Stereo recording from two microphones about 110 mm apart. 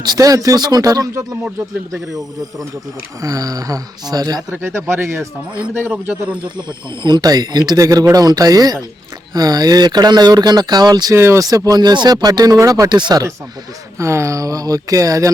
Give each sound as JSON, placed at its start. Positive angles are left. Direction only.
{"t": 0.0, "sound": "speech", "side_deg": -35}
{"t": 3.2, "sound": "speech", "side_deg": -30}
{"t": 4.5, "sound": "speech", "side_deg": -20}
{"t": 5.5, "sound": "a man's voice", "side_deg": -15}
{"t": 6.3, "sound": "speech", "side_deg": -45}
{"t": 11.1, "sound": "speech", "side_deg": -25}
{"t": 14.0, "sound": "speech", "side_deg": -25}